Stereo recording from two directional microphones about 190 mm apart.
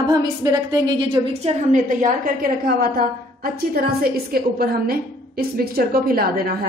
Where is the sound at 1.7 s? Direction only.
45° right (ahead or behind).